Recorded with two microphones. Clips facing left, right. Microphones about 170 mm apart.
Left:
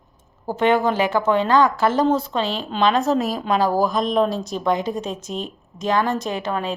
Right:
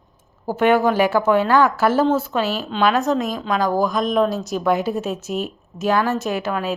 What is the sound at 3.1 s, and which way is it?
Speech, 35° left (ahead or behind).